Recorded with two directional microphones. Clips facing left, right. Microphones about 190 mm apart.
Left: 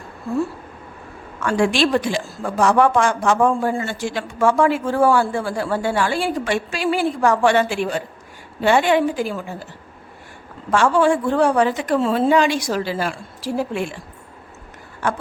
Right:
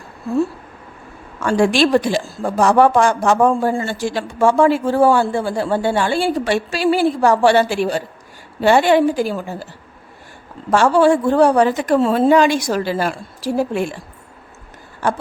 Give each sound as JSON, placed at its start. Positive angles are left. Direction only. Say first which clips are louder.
{"t": 1.5, "sound": "speech", "louder": "right 3 dB", "side_deg": -35}
{"t": 10.7, "sound": "speech", "louder": "right 3 dB", "side_deg": -40}
{"t": 15.0, "sound": "speech", "louder": "right 3 dB", "side_deg": -35}